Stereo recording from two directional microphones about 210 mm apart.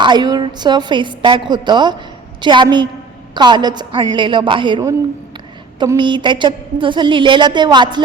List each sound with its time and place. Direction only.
0.0 s a woman's voice: 20° right (ahead or behind)